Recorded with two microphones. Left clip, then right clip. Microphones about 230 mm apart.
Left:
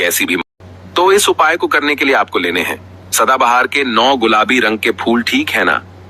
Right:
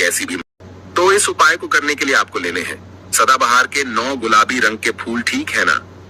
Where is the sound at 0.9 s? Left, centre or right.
Left.